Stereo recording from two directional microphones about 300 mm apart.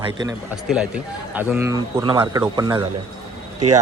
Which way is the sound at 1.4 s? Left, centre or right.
Centre.